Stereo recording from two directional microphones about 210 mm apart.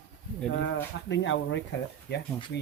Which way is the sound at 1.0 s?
60° left (ahead or behind).